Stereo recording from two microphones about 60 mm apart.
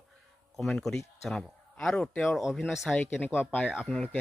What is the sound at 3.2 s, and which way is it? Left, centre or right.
Speech, left.